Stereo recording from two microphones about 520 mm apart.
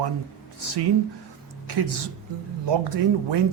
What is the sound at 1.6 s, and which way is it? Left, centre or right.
Speech, right.